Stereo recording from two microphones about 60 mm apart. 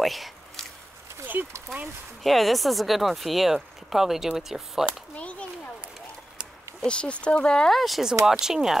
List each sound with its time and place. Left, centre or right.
0.0 s squish: centre
1.2 s speech: right
2.2 s speech: centre
5.1 s a sound: left
6.8 s speech: centre
7.7 s speech: centre